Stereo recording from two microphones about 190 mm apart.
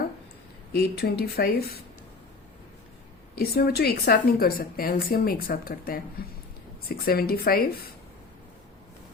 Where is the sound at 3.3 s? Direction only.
55° left (ahead or behind).